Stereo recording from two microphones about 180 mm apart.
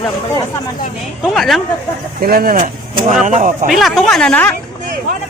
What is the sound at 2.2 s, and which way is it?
Speech, 55° right (ahead or behind).